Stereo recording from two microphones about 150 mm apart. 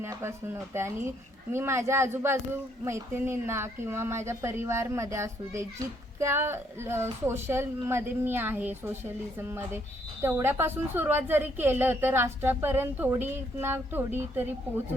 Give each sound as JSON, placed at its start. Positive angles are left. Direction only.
{"t": 0.0, "sound": "a woman's voice", "side_deg": -15}